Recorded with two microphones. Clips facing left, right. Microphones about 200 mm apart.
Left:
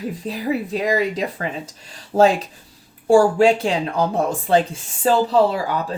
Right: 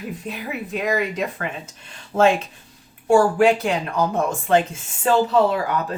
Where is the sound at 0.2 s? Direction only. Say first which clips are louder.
Left 6 dB; 35° left (ahead or behind).